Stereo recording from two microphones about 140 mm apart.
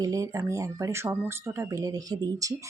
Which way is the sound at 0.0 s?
25° right (ahead or behind).